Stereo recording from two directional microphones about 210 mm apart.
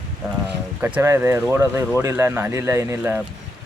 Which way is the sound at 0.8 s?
5° right (ahead or behind).